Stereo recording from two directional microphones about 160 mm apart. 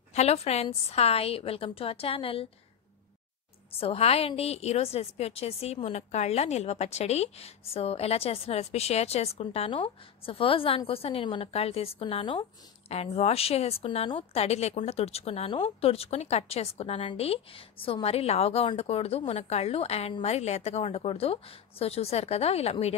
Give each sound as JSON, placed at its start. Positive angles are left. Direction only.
{"t": 0.1, "sound": "a woman's voice", "side_deg": 40}
{"t": 3.7, "sound": "a woman's voice", "side_deg": 40}